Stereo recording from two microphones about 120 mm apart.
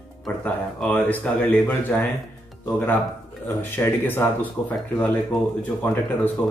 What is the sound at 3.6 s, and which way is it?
Speech, 15° left (ahead or behind).